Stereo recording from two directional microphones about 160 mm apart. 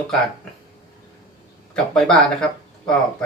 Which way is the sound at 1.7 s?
5° left (ahead or behind).